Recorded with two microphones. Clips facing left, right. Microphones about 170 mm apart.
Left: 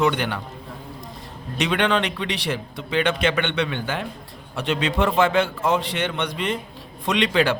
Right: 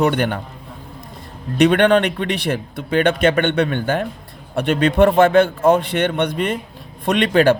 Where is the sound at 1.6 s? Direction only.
55° right (ahead or behind).